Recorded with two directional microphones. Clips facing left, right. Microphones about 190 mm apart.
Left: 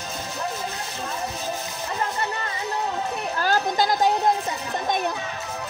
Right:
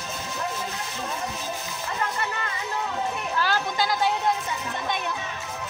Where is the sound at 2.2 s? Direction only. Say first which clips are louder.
Left 2 dB; 35° left (ahead or behind).